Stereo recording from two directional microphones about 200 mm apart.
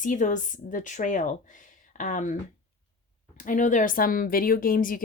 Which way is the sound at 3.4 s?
40° left (ahead or behind).